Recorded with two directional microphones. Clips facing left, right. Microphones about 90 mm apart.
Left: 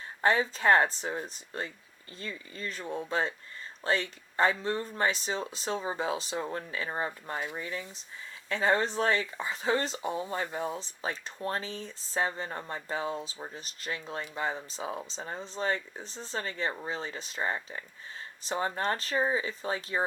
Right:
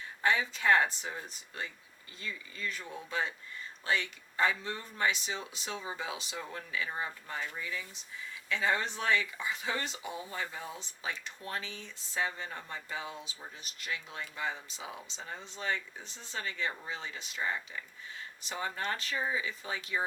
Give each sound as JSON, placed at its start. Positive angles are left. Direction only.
{"t": 0.2, "sound": "speech", "side_deg": 35}
{"t": 7.3, "sound": "speech", "side_deg": 20}
{"t": 7.6, "sound": "speech", "side_deg": 35}